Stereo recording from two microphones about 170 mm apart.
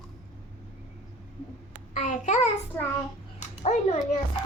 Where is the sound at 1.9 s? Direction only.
50° left (ahead or behind).